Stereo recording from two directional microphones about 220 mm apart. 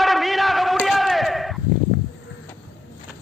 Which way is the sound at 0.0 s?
Centre (ahead or behind).